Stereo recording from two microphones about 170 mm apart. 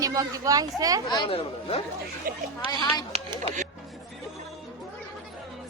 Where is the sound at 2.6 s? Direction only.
25° left (ahead or behind).